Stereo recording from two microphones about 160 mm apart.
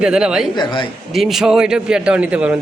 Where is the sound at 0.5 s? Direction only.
30° left (ahead or behind).